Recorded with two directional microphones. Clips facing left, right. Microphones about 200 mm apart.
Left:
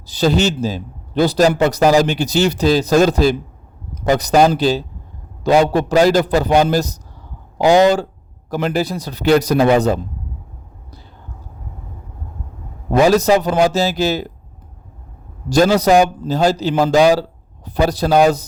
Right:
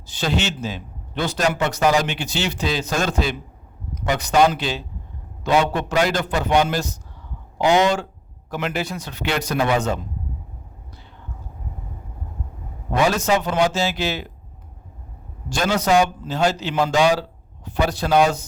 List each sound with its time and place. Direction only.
0.0 s a man's voice: 35° left (ahead or behind)
12.9 s a man's voice: 35° left (ahead or behind)
15.4 s a man's voice: 35° left (ahead or behind)